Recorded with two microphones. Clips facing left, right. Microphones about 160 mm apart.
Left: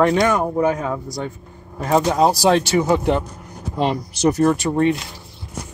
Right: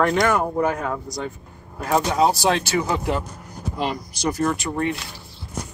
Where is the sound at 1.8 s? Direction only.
35° left (ahead or behind).